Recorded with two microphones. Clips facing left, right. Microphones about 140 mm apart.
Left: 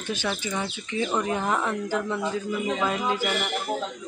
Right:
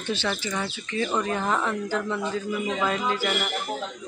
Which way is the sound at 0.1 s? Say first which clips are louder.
Right 1 dB; 10° left (ahead or behind).